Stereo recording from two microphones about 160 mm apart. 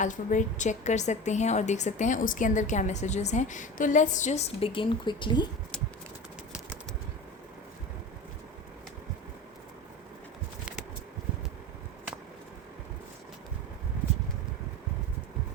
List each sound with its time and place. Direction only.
0.0 s a woman's voice: 50° left (ahead or behind); by 5.5 s 30° left (ahead or behind)